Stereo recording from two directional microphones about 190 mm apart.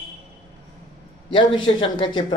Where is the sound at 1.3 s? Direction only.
25° left (ahead or behind).